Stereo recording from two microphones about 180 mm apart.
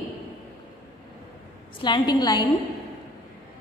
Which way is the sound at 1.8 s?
25° left (ahead or behind).